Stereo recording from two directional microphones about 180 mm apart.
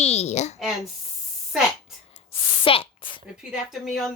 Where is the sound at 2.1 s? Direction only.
30° left (ahead or behind).